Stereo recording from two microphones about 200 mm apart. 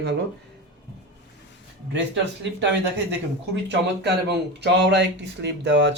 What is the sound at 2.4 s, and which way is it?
Speech, 60° right (ahead or behind).